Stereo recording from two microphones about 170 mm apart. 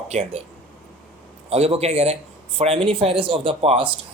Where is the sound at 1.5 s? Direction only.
35° right (ahead or behind).